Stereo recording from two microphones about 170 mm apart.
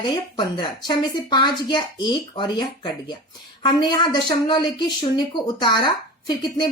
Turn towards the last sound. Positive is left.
turn(degrees=25)  # may be behind; listen again after turning